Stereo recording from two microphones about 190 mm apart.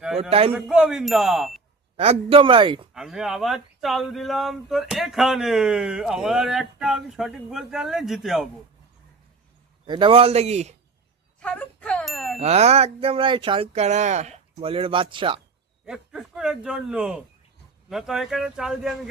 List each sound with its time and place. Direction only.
0.2 s speech: 30° right (ahead or behind)
0.5 s speech: 5° right (ahead or behind)
2.0 s speech: 30° right (ahead or behind)
2.9 s speech: centre (ahead or behind)
9.8 s speech: 25° right (ahead or behind)
11.3 s a sound: 5° left (ahead or behind)
12.4 s speech: 35° right (ahead or behind)
15.9 s speech: 5° right (ahead or behind)